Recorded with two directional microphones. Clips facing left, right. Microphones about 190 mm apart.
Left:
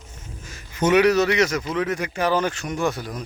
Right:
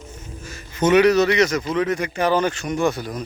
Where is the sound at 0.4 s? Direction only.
15° left (ahead or behind).